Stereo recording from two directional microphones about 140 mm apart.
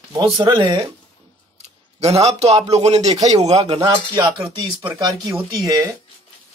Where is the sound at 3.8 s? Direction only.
30° right (ahead or behind).